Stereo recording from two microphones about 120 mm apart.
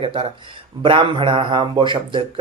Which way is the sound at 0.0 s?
45° right (ahead or behind).